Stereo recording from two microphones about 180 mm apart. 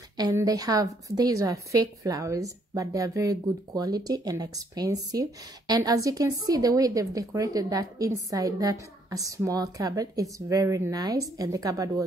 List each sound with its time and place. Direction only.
0.2 s a woman's voice: 20° right (ahead or behind)